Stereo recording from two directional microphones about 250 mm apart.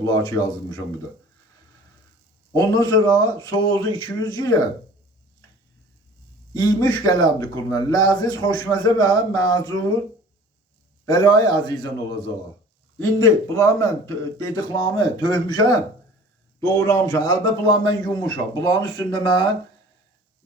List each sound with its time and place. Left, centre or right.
0.0 s speech: centre
2.5 s a man's voice: centre
6.5 s speech: centre
11.1 s speech: centre
13.0 s speech: centre